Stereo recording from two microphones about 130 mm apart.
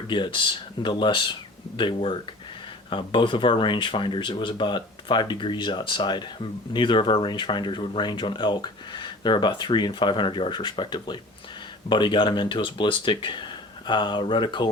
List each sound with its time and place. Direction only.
0.1 s speech: 40° left (ahead or behind)